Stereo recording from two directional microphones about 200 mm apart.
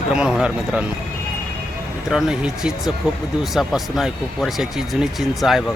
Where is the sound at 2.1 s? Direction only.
5° right (ahead or behind).